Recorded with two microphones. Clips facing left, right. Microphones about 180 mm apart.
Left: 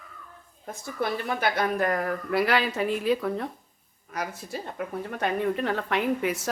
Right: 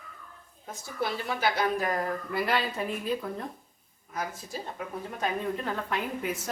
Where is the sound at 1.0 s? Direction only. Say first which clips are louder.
Left 2 dB; 55° left (ahead or behind); by 3.5 s 80° left.